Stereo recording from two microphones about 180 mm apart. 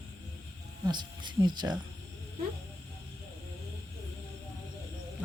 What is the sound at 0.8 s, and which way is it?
Speech, 25° right (ahead or behind).